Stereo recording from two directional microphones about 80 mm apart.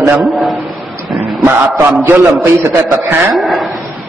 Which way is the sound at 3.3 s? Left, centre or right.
Centre.